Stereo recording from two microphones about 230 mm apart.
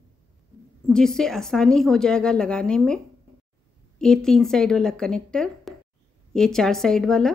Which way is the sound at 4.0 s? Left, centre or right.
Centre.